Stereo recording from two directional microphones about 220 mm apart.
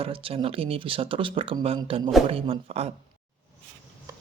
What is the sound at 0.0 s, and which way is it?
Speech, 25° right (ahead or behind).